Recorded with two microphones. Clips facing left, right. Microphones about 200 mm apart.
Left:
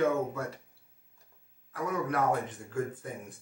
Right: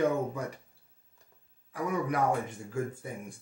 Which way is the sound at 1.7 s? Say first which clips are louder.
Right 1 dB; 15° right (ahead or behind).